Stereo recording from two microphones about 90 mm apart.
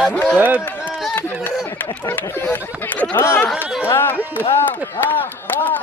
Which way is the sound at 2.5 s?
25° left (ahead or behind).